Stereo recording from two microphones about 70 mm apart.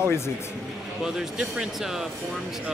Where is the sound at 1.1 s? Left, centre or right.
Centre.